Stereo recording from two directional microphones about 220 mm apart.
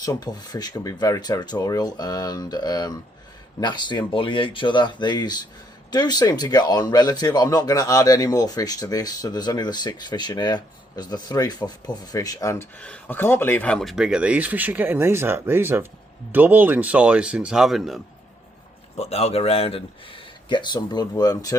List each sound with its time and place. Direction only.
0.0 s speech: 15° left (ahead or behind); by 18.0 s centre (ahead or behind)
18.9 s speech: 30° left (ahead or behind)